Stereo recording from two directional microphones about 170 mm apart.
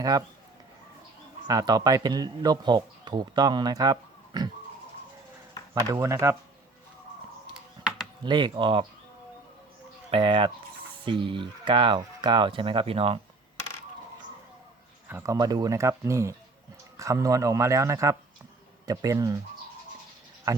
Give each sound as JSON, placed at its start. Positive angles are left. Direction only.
{"t": 0.0, "sound": "speech", "side_deg": -20}
{"t": 1.5, "sound": "speech", "side_deg": -20}
{"t": 5.8, "sound": "speech", "side_deg": -20}
{"t": 8.2, "sound": "speech", "side_deg": -25}
{"t": 10.1, "sound": "speech", "side_deg": -30}
{"t": 15.0, "sound": "speech", "side_deg": -15}